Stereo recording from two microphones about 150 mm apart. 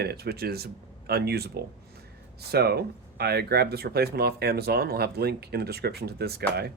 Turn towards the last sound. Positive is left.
turn(degrees=-90)